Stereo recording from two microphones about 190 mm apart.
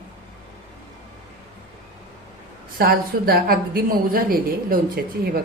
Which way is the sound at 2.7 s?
55° right (ahead or behind).